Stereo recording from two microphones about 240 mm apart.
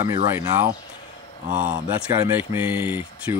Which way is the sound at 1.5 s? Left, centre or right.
Right.